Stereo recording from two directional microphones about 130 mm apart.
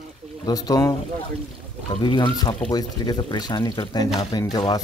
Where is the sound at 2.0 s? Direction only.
35° left (ahead or behind).